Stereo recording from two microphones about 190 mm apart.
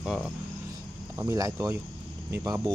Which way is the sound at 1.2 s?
15° right (ahead or behind).